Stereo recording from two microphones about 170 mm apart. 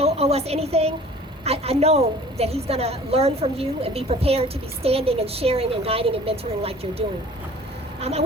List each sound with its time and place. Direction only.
0.0 s a woman's voice: 35° right (ahead or behind)
8.0 s a woman's voice: 35° right (ahead or behind)